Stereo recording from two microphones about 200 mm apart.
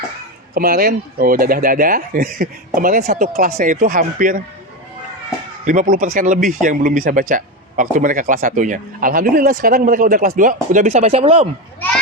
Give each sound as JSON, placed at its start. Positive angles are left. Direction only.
{"t": 0.5, "sound": "speech", "side_deg": -50}
{"t": 5.6, "sound": "speech", "side_deg": -40}